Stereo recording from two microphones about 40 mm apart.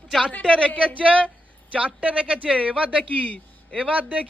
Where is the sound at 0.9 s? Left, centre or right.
Right.